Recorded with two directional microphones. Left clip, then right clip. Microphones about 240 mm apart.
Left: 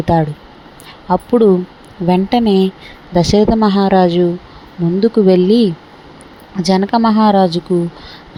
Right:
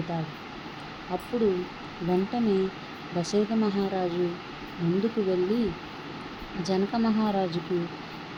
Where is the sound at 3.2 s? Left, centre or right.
Left.